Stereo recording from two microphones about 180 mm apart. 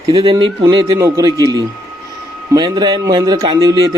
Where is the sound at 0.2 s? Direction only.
30° right (ahead or behind).